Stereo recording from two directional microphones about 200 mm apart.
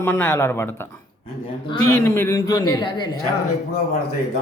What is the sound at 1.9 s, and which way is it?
Speech, 10° left (ahead or behind).